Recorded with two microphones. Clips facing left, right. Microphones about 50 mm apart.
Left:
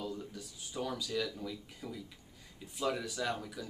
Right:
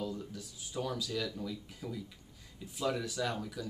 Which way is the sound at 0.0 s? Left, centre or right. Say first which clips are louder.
Right 2 dB; centre.